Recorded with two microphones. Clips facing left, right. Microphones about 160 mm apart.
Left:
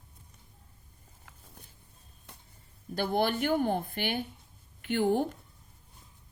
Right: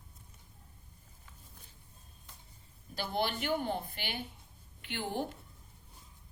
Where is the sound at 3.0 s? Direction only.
50° left (ahead or behind).